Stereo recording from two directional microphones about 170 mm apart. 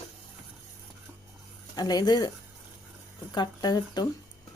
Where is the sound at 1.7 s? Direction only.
25° left (ahead or behind).